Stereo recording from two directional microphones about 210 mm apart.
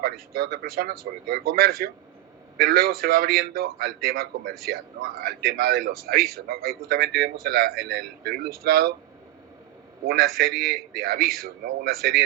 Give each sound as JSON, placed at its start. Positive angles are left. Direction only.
{"t": 0.0, "sound": "a man's voice", "side_deg": -45}
{"t": 10.1, "sound": "a man's voice", "side_deg": -45}